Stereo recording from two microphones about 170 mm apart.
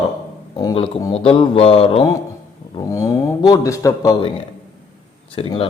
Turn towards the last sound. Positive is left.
turn(degrees=30)  # may be behind; listen again after turning